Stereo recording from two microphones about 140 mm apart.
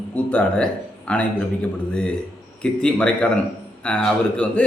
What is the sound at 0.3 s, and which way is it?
A man's voice, 10° left (ahead or behind).